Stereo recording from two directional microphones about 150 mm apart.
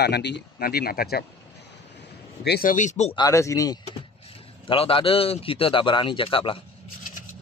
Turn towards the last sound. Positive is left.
turn(degrees=35)  # may be behind; listen again after turning